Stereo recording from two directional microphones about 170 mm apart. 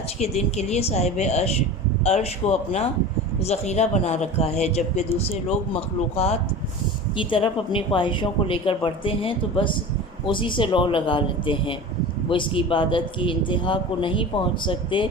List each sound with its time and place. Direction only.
0.2 s a man's voice: 40° left (ahead or behind)